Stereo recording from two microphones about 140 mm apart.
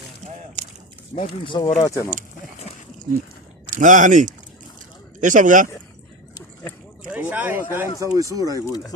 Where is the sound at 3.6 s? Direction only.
65° right (ahead or behind).